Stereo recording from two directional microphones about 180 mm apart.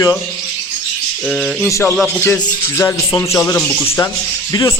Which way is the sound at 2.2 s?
15° left (ahead or behind).